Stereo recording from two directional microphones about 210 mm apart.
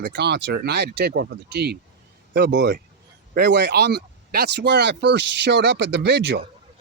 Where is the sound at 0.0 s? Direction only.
55° right (ahead or behind).